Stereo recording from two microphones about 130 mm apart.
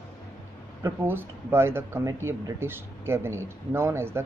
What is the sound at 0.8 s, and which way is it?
Speech, 15° right (ahead or behind).